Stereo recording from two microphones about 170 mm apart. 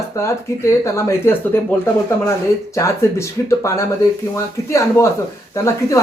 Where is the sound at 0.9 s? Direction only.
15° left (ahead or behind).